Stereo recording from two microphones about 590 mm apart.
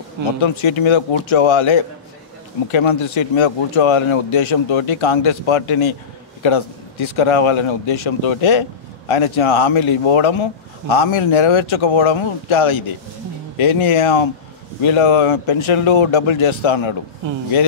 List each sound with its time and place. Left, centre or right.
0.4 s speech: left